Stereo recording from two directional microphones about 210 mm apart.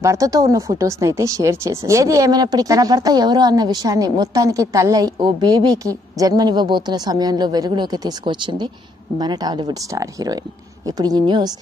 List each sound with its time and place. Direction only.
0.0 s speech: 15° right (ahead or behind)